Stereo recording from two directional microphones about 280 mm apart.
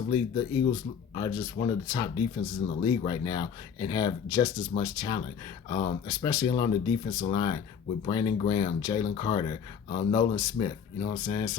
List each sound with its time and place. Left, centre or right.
0.1 s speech: centre